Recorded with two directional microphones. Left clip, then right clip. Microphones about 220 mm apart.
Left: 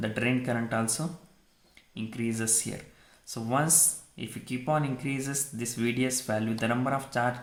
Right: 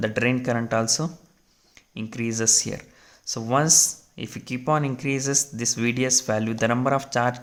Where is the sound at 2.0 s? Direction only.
35° right (ahead or behind).